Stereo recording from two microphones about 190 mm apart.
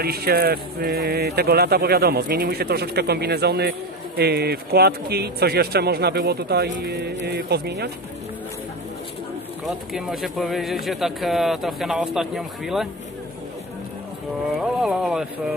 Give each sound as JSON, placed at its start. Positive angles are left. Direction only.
{"t": 0.0, "sound": "speech", "side_deg": -55}
{"t": 9.9, "sound": "speech", "side_deg": 0}
{"t": 14.6, "sound": "speech", "side_deg": 0}